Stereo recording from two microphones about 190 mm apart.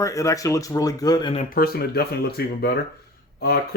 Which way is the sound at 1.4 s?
50° left (ahead or behind).